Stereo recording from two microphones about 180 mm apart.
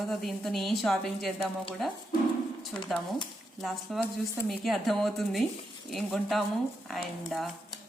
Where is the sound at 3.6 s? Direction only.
Centre (ahead or behind).